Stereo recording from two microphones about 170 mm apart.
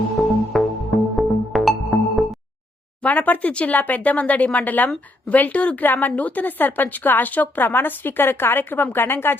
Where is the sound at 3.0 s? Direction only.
10° left (ahead or behind).